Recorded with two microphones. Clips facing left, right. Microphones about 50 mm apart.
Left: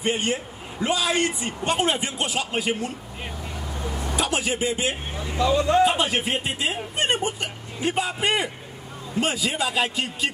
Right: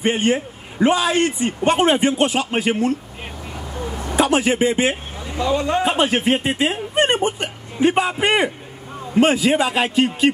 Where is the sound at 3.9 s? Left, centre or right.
Right.